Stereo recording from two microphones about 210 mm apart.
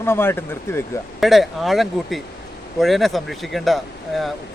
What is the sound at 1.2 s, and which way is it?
Speech, centre (ahead or behind).